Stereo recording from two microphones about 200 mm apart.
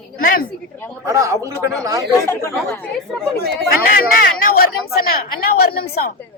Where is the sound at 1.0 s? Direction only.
15° right (ahead or behind).